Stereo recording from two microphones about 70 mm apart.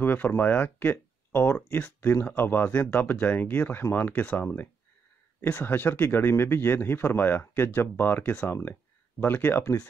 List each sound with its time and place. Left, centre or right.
0.0 s speech: left